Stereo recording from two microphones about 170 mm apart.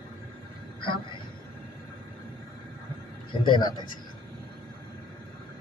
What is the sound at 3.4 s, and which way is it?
Speech, 25° left (ahead or behind).